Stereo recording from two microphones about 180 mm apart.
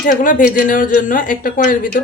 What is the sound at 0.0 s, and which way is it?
Speech, 45° left (ahead or behind).